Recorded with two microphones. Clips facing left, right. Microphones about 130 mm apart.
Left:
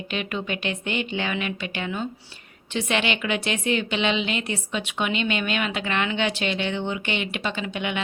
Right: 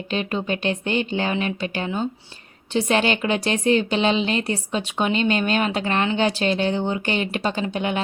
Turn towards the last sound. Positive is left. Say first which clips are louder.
# right 4 dB
turn(degrees=-40)  # may be behind; listen again after turning